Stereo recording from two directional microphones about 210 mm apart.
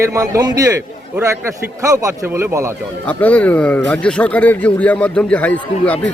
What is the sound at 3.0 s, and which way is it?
Speech, 5° left (ahead or behind).